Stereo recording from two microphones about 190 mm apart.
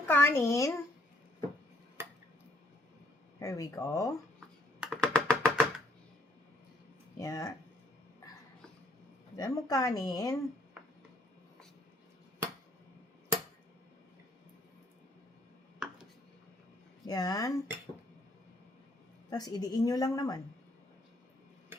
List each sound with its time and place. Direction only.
0.1 s speech: 10° left (ahead or behind)
3.4 s speech: 20° left (ahead or behind)
4.4 s computer keyboard: centre (ahead or behind)
7.2 s speech: 20° left (ahead or behind)
9.3 s a woman's voice: 20° left (ahead or behind)
15.8 s a sound: centre (ahead or behind)
17.1 s a woman's voice: 20° left (ahead or behind)
19.3 s a woman's voice: 20° left (ahead or behind)